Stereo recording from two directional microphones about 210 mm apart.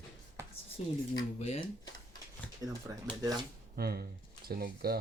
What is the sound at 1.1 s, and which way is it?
Speech, 25° left (ahead or behind).